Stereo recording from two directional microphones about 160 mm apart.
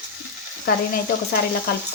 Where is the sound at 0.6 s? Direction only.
70° left (ahead or behind).